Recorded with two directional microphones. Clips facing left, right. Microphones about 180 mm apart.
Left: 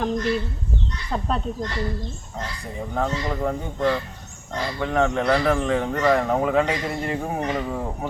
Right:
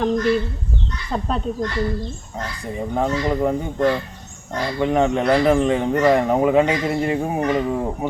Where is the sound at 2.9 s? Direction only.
15° right (ahead or behind).